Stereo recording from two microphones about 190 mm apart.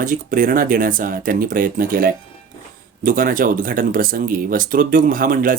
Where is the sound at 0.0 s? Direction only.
45° right (ahead or behind).